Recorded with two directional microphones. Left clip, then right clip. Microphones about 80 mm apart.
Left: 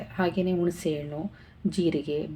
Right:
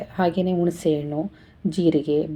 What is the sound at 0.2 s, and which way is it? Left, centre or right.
A woman's voice, right.